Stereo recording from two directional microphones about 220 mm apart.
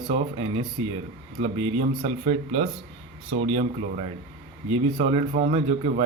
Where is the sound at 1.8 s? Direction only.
30° right (ahead or behind).